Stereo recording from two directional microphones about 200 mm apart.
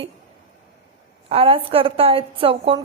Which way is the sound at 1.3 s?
30° right (ahead or behind).